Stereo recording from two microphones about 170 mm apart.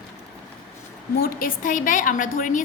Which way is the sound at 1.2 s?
60° left (ahead or behind).